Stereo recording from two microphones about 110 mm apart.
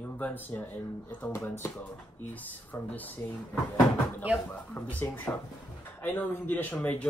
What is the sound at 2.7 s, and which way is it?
Speech, 15° left (ahead or behind).